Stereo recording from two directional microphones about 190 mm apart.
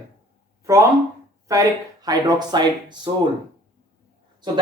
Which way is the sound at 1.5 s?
20° right (ahead or behind).